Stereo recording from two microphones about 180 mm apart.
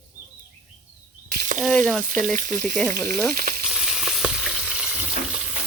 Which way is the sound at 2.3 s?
45° right (ahead or behind).